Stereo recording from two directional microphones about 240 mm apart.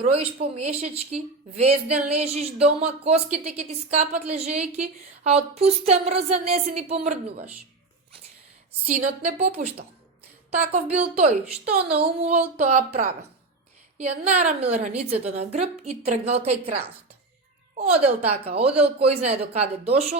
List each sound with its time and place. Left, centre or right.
0.0 s speech: right
9.2 s speech: right
14.3 s speech: right
17.9 s speech: right